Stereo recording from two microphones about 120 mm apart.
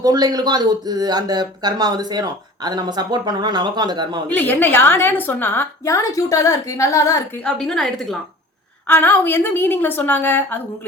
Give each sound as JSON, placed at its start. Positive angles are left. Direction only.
{"t": 0.0, "sound": "speech", "side_deg": -35}
{"t": 4.3, "sound": "a woman's voice", "side_deg": 15}
{"t": 7.4, "sound": "a woman's voice", "side_deg": 5}
{"t": 8.9, "sound": "a woman's voice", "side_deg": 15}